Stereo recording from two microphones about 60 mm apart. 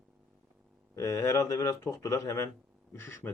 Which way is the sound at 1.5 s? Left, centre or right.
Left.